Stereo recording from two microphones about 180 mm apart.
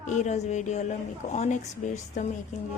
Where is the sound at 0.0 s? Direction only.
40° left (ahead or behind).